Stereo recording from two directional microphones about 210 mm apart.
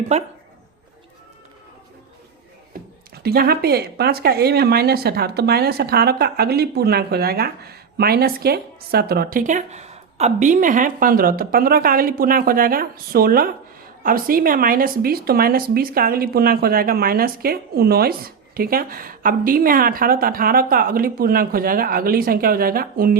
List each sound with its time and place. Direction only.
0.1 s speech: 30° right (ahead or behind)
3.2 s speech: 45° right (ahead or behind)